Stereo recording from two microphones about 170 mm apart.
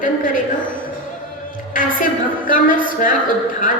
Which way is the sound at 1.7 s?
55° left (ahead or behind).